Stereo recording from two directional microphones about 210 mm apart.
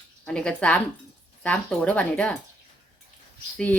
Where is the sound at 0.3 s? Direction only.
5° left (ahead or behind).